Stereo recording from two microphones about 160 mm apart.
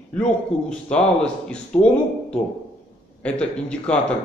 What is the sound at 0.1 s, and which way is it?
A man's voice, 5° left (ahead or behind).